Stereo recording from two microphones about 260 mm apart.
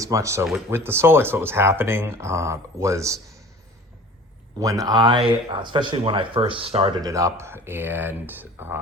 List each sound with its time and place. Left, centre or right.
0.0 s speech: centre
4.5 s speech: centre